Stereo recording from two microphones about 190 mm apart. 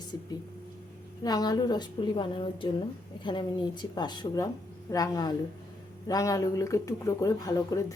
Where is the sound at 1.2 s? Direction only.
20° left (ahead or behind).